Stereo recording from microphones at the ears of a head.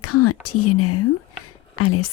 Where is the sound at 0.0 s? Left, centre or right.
Left.